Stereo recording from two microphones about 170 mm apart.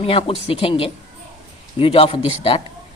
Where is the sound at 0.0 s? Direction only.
35° left (ahead or behind).